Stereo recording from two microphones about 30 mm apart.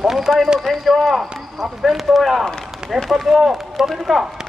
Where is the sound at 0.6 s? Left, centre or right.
Centre.